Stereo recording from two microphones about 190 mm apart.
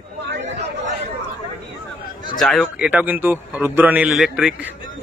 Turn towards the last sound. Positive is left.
turn(degrees=-5)  # may be behind; listen again after turning